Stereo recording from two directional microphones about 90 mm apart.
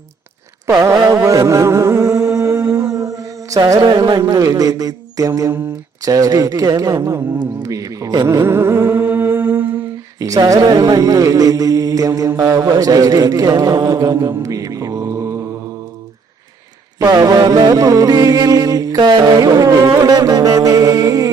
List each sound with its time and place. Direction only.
0.7 s mantra: 40° right (ahead or behind)
2.9 s mantra: 40° right (ahead or behind)
4.4 s speech: 40° right (ahead or behind)
8.4 s music: 25° right (ahead or behind)
9.7 s speech: 40° right (ahead or behind)
17.0 s music: 45° right (ahead or behind)